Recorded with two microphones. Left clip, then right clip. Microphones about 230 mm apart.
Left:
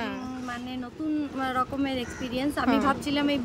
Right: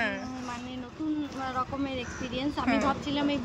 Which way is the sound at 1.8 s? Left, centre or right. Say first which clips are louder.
Left 3 dB; centre.